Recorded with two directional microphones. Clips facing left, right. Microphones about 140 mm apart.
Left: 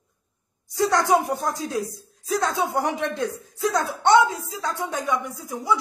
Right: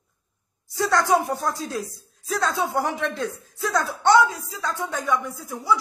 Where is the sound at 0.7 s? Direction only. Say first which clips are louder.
Left 1 dB; 20° left (ahead or behind).